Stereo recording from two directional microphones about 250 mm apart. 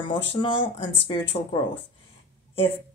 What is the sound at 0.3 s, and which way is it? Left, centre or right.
Speech, left.